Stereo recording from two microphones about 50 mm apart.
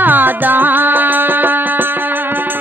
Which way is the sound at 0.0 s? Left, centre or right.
Right.